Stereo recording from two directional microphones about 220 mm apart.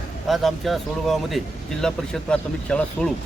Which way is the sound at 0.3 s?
Centre (ahead or behind).